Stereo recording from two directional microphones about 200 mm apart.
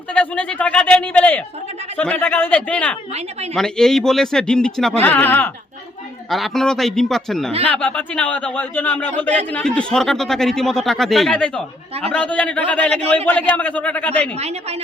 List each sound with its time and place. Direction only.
0.1 s a man's voice: 5° left (ahead or behind)
14.3 s a woman's voice: 30° right (ahead or behind)